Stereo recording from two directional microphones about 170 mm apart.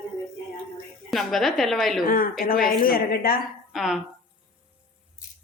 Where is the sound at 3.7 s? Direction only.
Centre (ahead or behind).